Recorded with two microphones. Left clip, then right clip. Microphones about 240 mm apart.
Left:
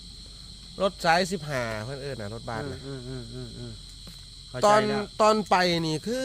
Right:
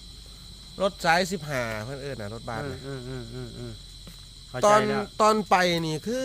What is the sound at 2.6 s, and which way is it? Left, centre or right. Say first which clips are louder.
Speech: right 1 dB; right.